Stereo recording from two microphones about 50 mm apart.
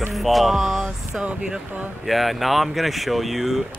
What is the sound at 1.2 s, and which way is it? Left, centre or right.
Speech, right.